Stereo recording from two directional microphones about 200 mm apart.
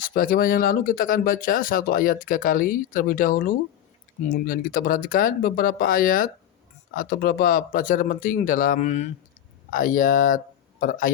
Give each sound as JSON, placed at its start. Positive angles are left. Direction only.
{"t": 0.0, "sound": "speech", "side_deg": 45}